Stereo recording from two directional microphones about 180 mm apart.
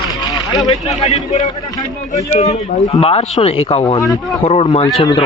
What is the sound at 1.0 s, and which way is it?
Speech, 40° left (ahead or behind).